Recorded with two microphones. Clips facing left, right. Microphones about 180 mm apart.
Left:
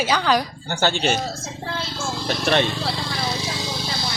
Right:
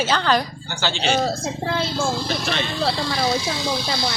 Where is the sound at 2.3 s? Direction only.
55° left (ahead or behind).